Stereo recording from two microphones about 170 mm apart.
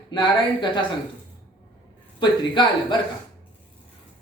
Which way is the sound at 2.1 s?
25° left (ahead or behind).